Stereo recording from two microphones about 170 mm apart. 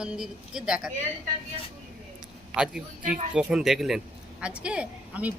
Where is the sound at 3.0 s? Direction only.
50° right (ahead or behind).